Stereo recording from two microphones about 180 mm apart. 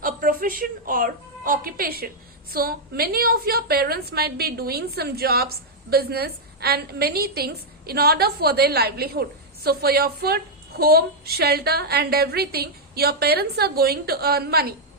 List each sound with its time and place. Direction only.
0.0 s a woman's voice: 50° right (ahead or behind)